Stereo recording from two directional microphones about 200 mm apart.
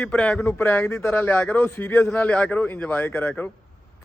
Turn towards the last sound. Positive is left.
turn(degrees=10)  # may be behind; listen again after turning